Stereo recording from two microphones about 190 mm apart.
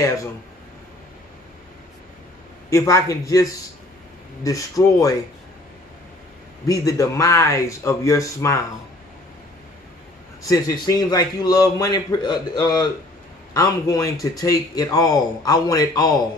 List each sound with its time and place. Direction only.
2.7 s speech: 15° left (ahead or behind)
6.7 s speech: 15° left (ahead or behind)
10.4 s a man's voice: 20° left (ahead or behind)